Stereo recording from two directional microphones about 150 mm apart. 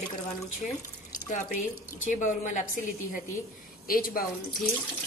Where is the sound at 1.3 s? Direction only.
55° left (ahead or behind).